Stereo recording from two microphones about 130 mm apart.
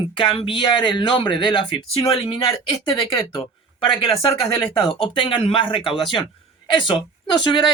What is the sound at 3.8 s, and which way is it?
Speech, 35° left (ahead or behind).